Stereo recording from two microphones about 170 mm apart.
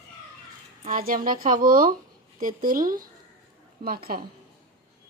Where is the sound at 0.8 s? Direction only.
55° right (ahead or behind).